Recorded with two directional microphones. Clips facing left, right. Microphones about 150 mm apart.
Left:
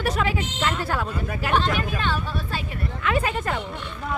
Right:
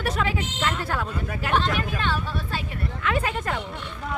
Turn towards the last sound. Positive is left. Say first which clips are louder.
# left 2 dB
turn(degrees=5)  # may be behind; listen again after turning